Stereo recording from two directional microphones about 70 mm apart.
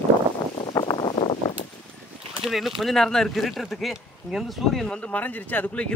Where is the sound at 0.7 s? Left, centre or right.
Left.